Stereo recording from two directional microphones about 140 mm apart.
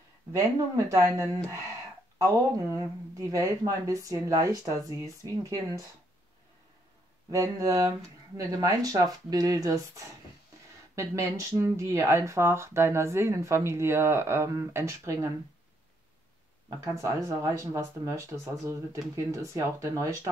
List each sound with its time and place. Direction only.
0.3 s speech: 25° right (ahead or behind)
7.2 s speech: 25° right (ahead or behind)
16.8 s speech: 20° right (ahead or behind)